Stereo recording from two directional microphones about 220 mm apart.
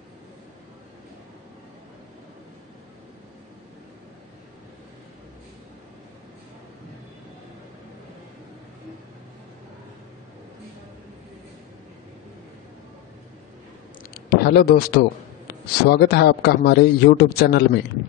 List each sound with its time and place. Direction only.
14.1 s a man's voice: 45° left (ahead or behind)